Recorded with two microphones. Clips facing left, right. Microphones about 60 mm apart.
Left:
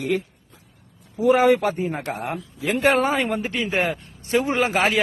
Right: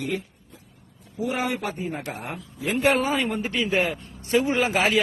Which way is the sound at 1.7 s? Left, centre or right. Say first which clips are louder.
Left 6 dB; left.